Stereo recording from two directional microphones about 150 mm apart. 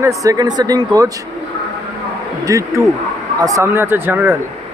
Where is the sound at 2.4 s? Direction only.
20° right (ahead or behind).